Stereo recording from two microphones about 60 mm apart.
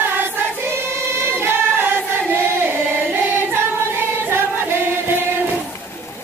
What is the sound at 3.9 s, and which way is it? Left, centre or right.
Singing, right.